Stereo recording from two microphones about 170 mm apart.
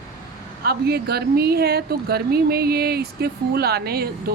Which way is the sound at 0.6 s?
70° right (ahead or behind).